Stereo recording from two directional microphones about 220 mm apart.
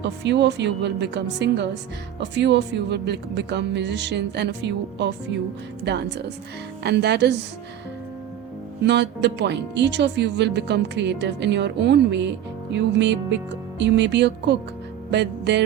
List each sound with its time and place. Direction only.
0.0 s speech: 50° right (ahead or behind)
8.8 s speech: 50° right (ahead or behind)